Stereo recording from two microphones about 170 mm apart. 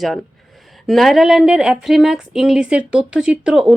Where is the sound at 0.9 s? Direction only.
Centre (ahead or behind).